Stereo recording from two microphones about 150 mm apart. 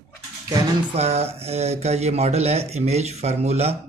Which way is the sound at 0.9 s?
45° right (ahead or behind).